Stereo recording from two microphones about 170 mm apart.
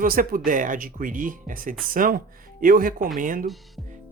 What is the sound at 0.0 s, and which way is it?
Speech, 55° right (ahead or behind).